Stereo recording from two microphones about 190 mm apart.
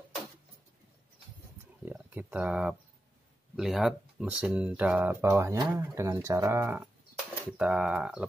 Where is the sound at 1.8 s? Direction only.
10° right (ahead or behind).